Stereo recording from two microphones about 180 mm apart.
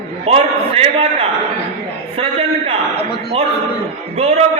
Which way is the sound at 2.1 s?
35° right (ahead or behind).